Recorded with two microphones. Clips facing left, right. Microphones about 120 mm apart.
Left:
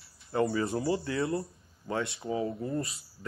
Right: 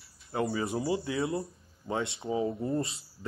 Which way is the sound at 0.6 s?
20° right (ahead or behind).